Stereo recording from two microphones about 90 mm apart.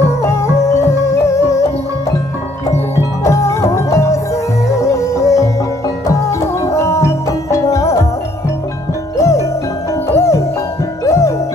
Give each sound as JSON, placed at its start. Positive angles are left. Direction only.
{"t": 0.2, "sound": "music", "side_deg": 35}
{"t": 9.2, "sound": "music", "side_deg": 35}